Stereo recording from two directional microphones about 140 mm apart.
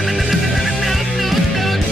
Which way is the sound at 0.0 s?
Centre (ahead or behind).